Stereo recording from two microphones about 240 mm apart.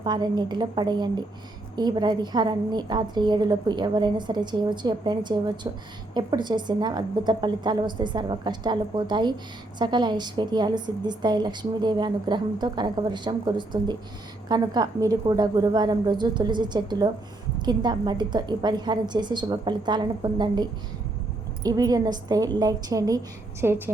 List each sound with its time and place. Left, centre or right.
0.0 s a woman's voice: centre